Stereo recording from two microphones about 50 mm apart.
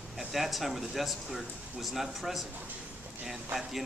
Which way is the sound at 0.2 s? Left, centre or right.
Centre.